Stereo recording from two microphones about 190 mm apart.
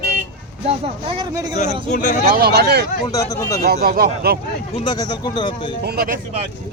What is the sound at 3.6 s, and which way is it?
Speech, 50° right (ahead or behind).